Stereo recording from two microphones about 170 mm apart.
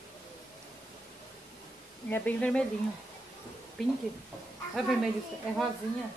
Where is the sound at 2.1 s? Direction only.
10° left (ahead or behind).